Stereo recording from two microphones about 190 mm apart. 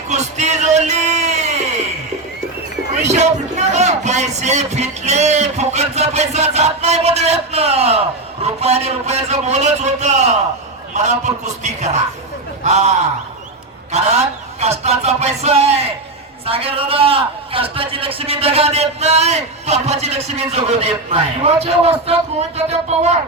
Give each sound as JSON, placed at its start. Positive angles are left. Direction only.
{"t": 0.1, "sound": "speech", "side_deg": -40}
{"t": 3.1, "sound": "speech", "side_deg": -35}
{"t": 12.6, "sound": "speech", "side_deg": -35}